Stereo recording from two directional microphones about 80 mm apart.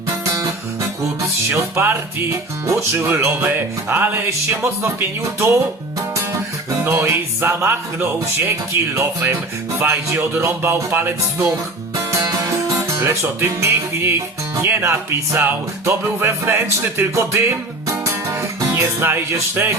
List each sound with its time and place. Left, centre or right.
0.3 s music: right
1.5 s music: right
2.6 s music: right
6.8 s music: right
11.5 s music: right